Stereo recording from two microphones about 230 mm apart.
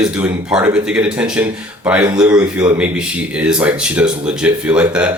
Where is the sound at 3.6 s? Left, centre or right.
Centre.